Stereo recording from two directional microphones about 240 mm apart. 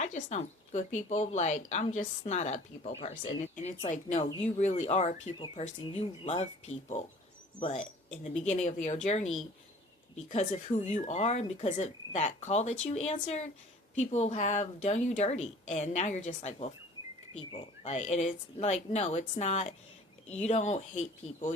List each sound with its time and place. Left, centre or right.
0.0 s a woman's voice: left